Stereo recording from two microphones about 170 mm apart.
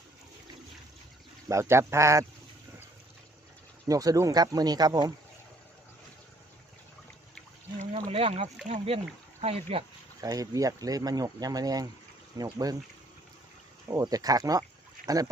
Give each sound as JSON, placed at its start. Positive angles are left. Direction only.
{"t": 1.5, "sound": "speech", "side_deg": -15}
{"t": 3.8, "sound": "speech", "side_deg": -20}
{"t": 7.8, "sound": "a sound", "side_deg": -35}
{"t": 9.4, "sound": "speech", "side_deg": -35}
{"t": 10.2, "sound": "speech", "side_deg": -20}
{"t": 13.8, "sound": "speech", "side_deg": -20}